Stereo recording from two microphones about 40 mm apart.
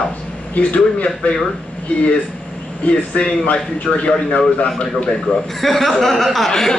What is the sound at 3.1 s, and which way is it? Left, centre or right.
Speech, left.